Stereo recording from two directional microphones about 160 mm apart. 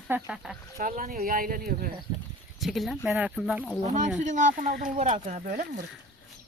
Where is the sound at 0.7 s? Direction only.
55° right (ahead or behind).